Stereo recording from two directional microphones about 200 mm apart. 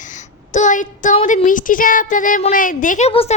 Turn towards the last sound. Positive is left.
turn(degrees=30)  # may be behind; listen again after turning